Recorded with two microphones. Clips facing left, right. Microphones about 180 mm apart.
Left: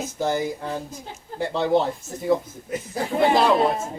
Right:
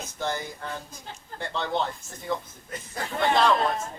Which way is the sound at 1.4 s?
5° left (ahead or behind).